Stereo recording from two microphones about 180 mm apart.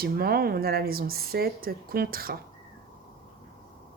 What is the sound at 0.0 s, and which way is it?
Speech, 60° right (ahead or behind).